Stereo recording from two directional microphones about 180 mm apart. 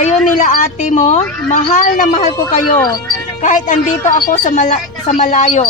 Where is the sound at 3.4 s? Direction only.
45° left (ahead or behind).